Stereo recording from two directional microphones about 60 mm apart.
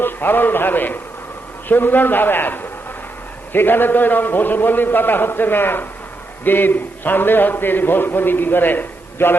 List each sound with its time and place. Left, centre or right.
0.0 s a man's voice: left